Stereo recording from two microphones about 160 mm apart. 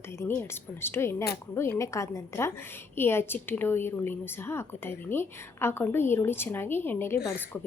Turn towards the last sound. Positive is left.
turn(degrees=10)  # may be behind; listen again after turning